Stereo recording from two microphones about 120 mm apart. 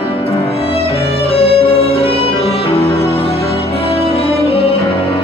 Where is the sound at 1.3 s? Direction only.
55° left (ahead or behind).